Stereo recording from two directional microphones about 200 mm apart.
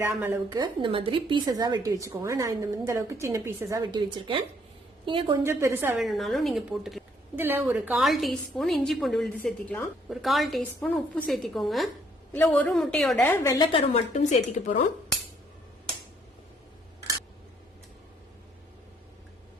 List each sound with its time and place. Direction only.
0.0 s a woman's voice: 10° right (ahead or behind)
6.1 s a woman's voice: centre (ahead or behind)
13.7 s a woman's voice: 30° left (ahead or behind)